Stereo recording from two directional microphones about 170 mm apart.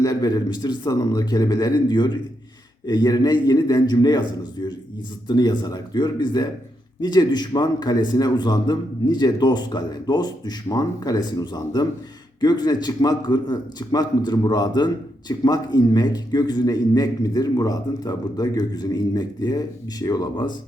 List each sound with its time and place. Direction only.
0.0 s a man's voice: 20° left (ahead or behind)